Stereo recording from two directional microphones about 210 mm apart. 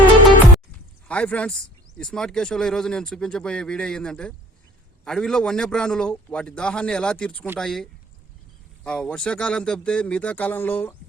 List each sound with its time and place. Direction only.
1.0 s speech: 5° left (ahead or behind)